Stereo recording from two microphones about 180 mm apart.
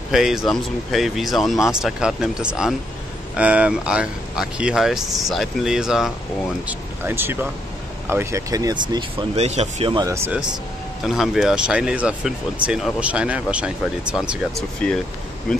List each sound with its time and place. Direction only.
0.1 s speech: centre (ahead or behind); by 9.4 s 25° right (ahead or behind)
9.4 s speech: 35° right (ahead or behind)
9.9 s speech: 15° right (ahead or behind)
11.1 s speech: centre (ahead or behind)
14.8 s speech: 5° left (ahead or behind)